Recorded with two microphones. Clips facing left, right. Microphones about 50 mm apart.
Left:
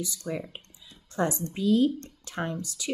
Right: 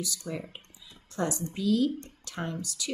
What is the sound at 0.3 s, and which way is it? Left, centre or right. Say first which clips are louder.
A woman's voice: left 3 dB; centre.